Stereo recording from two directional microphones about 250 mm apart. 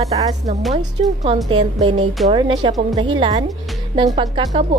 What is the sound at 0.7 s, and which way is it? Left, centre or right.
Speech, right.